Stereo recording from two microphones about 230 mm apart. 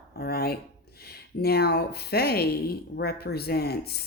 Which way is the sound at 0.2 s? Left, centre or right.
Left.